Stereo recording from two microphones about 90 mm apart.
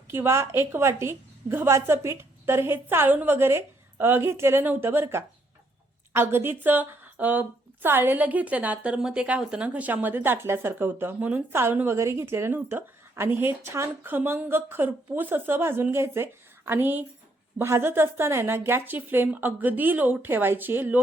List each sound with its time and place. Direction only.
0.1 s a woman's voice: 30° right (ahead or behind)